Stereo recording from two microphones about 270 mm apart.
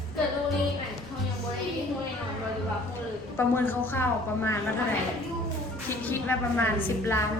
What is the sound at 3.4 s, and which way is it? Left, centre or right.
Speech, centre.